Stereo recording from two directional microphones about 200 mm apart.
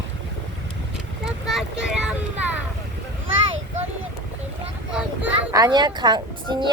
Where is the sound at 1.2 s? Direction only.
Centre (ahead or behind).